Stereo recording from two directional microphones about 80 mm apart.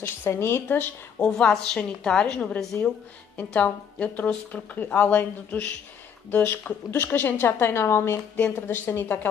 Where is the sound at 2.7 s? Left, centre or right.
Left.